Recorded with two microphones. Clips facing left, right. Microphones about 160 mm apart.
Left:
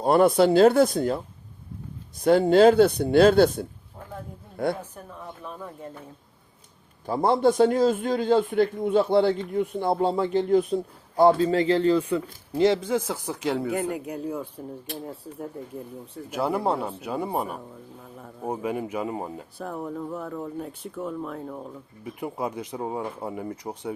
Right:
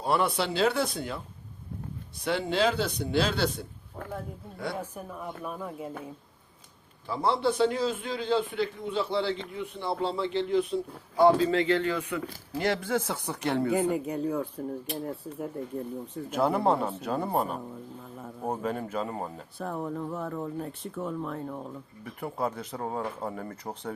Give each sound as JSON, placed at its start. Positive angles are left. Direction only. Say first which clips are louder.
{"t": 0.0, "sound": "a man's voice", "louder": "left 9 dB", "side_deg": 45}
{"t": 2.2, "sound": "a man's voice", "louder": "left 10 dB", "side_deg": 45}
{"t": 4.8, "sound": "a woman's voice", "louder": "right 3 dB", "side_deg": -10}
{"t": 7.1, "sound": "a man's voice", "louder": "left 6 dB", "side_deg": 45}
{"t": 11.4, "sound": "speech", "louder": "left 5 dB", "side_deg": 35}
{"t": 19.5, "sound": "speech", "louder": "even", "side_deg": 0}
{"t": 22.0, "sound": "speech", "louder": "left 2 dB", "side_deg": 15}